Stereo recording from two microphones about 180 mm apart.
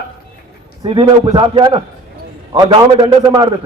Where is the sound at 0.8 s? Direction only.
25° right (ahead or behind).